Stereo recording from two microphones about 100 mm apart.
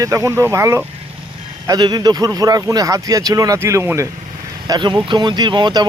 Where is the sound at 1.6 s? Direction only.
40° right (ahead or behind).